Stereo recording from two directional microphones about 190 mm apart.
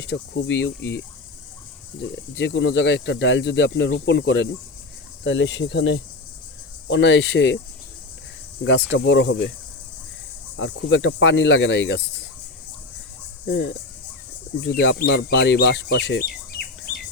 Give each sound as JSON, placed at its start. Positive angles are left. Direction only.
{"t": 0.0, "sound": "speech", "side_deg": 65}
{"t": 8.6, "sound": "speech", "side_deg": 70}
{"t": 10.6, "sound": "speech", "side_deg": 75}
{"t": 13.5, "sound": "speech", "side_deg": 65}